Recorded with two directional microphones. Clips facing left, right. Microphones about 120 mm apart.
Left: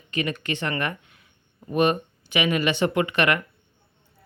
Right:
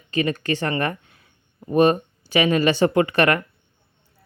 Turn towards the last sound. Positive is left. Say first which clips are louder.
# right 4 dB
turn(degrees=-35)  # may be behind; listen again after turning